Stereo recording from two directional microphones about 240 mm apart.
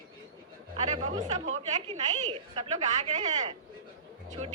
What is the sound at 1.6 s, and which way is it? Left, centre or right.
A woman's voice, right.